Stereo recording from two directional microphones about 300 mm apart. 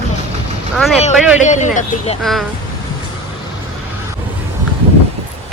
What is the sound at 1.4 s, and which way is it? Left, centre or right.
Speech, left.